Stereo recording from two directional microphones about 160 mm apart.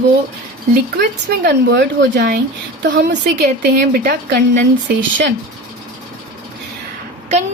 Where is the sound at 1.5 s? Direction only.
90° right.